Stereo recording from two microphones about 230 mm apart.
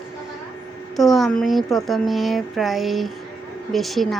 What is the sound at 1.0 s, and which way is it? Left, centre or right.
A woman's voice, centre.